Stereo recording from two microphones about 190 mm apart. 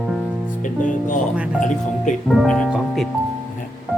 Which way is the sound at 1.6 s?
40° left (ahead or behind).